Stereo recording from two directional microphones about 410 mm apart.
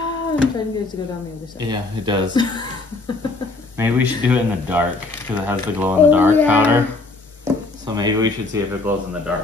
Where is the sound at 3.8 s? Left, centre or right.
Centre.